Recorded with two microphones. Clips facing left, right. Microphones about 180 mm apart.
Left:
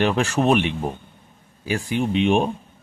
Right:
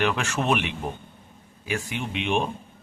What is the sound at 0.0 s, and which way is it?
Speech, 35° left (ahead or behind).